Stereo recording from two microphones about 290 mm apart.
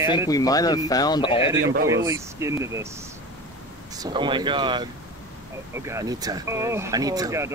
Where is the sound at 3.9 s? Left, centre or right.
Centre.